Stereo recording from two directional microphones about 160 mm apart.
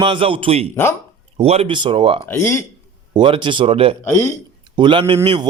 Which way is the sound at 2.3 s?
15° left (ahead or behind).